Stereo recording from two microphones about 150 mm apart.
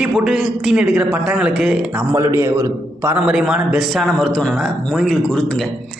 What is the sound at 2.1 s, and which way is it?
Speech, 20° right (ahead or behind).